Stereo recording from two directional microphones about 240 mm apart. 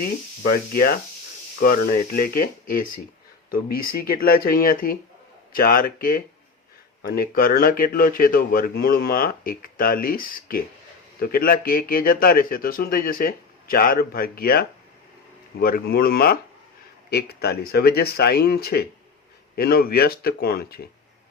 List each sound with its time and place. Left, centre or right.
0.0 s speech: left